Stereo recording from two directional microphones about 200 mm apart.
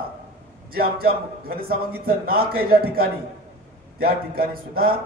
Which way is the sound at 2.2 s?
50° right (ahead or behind).